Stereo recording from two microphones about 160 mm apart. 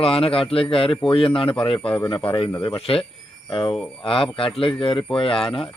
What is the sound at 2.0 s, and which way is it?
Speech, 30° left (ahead or behind).